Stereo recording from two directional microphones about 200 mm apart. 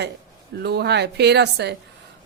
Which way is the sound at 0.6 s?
55° right (ahead or behind).